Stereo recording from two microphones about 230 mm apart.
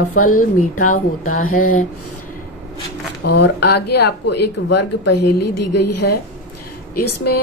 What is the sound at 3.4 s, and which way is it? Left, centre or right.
Speech, left.